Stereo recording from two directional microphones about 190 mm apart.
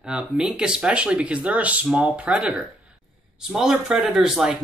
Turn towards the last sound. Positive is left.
turn(degrees=-5)  # may be behind; listen again after turning